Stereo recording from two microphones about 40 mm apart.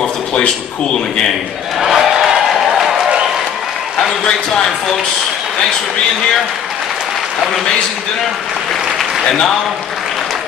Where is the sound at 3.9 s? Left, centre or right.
Centre.